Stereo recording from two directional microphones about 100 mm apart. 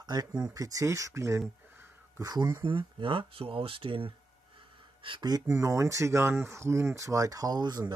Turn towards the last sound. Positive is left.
turn(degrees=-45)  # may be behind; listen again after turning